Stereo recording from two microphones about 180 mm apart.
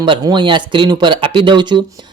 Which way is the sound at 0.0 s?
25° right (ahead or behind).